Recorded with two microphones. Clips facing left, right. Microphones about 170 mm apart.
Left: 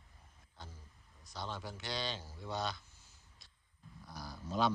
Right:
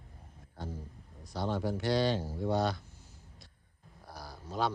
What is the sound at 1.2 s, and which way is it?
Speech, 55° right (ahead or behind).